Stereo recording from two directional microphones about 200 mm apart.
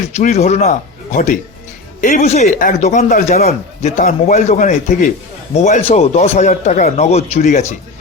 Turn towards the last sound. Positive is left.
turn(degrees=35)  # may be behind; listen again after turning